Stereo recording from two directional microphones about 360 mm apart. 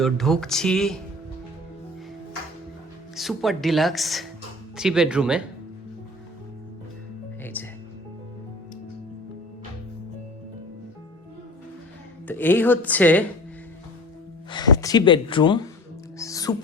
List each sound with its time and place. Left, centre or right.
0.0 s speech: centre
3.2 s speech: centre
7.4 s music: centre
12.3 s speech: centre
14.5 s speech: centre
16.1 s music: centre